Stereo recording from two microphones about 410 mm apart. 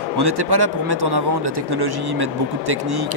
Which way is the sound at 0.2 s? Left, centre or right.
Right.